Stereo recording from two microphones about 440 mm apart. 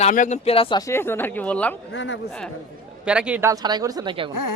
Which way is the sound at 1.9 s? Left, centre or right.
Left.